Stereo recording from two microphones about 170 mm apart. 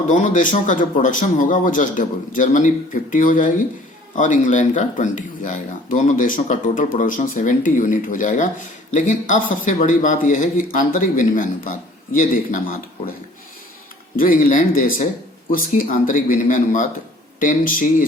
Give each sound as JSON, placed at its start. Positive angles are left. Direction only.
{"t": 0.1, "sound": "speech", "side_deg": 50}
{"t": 14.2, "sound": "speech", "side_deg": 50}